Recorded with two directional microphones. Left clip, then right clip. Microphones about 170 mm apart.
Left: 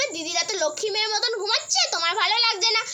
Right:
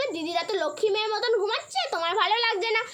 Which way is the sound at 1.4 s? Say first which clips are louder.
Left 4 dB; 30° right (ahead or behind).